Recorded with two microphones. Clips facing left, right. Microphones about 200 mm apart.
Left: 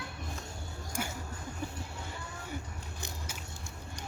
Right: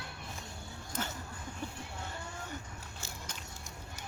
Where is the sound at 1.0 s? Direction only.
10° left (ahead or behind).